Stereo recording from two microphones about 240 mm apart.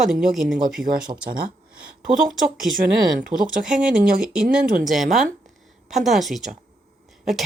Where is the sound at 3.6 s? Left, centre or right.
Centre.